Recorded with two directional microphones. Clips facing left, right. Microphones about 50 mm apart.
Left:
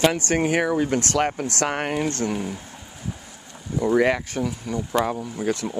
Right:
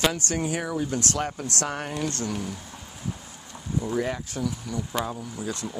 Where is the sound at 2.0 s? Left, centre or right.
Left.